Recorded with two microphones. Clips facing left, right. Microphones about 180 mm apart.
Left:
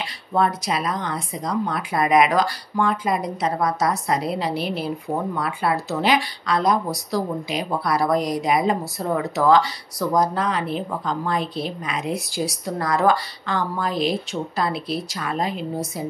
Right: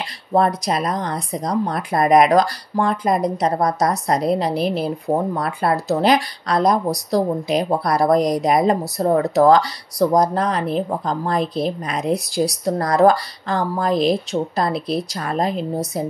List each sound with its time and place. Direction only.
0.3 s speech: 40° right (ahead or behind)